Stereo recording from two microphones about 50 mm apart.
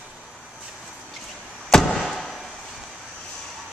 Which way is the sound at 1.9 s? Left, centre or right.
Centre.